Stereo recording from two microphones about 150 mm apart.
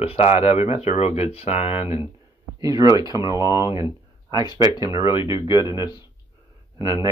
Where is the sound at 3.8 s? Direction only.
30° left (ahead or behind).